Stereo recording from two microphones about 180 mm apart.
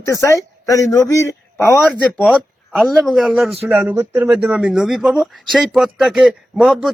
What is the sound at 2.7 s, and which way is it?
Speech, centre (ahead or behind).